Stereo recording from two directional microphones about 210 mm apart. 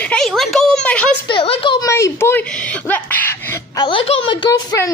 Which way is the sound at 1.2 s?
25° left (ahead or behind).